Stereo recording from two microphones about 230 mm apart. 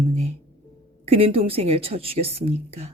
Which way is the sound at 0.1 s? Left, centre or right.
Right.